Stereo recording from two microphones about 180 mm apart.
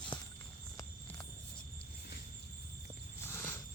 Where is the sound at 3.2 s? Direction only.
15° left (ahead or behind).